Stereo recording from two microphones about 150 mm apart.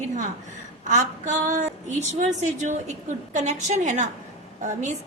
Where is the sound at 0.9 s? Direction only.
55° right (ahead or behind).